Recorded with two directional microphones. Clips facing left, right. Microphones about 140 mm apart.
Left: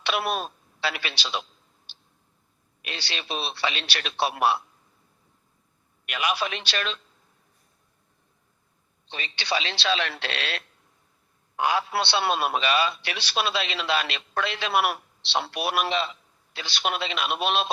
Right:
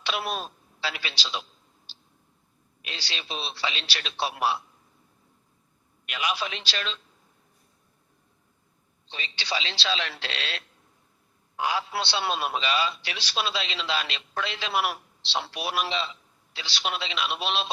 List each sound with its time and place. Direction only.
0.0 s a woman's voice: 60° left (ahead or behind)
1.9 s a sound: 60° left (ahead or behind)
2.8 s a man's voice: 60° left (ahead or behind)
6.1 s a man's voice: 60° left (ahead or behind)
9.0 s a man's voice: 55° left (ahead or behind)